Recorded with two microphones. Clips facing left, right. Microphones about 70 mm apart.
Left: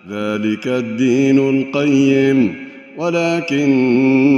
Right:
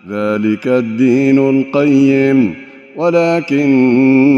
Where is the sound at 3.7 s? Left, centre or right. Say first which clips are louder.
Right 3 dB; right.